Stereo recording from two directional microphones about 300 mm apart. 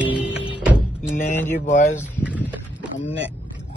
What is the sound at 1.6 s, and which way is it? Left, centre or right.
Speech, left.